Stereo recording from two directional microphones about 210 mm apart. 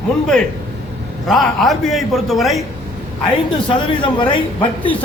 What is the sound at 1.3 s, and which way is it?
A man's voice, centre (ahead or behind).